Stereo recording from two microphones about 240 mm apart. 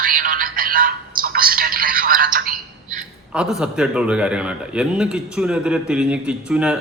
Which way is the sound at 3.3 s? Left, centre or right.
Centre.